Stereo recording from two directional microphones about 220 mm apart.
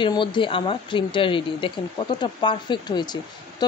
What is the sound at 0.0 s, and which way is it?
Speech, 20° left (ahead or behind).